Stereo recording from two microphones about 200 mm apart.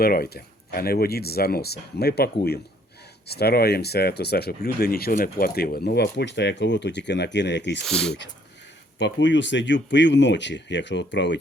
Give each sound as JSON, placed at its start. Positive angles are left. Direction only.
{"t": 0.0, "sound": "speech", "side_deg": 50}
{"t": 7.9, "sound": "speech", "side_deg": 0}
{"t": 9.0, "sound": "speech", "side_deg": 60}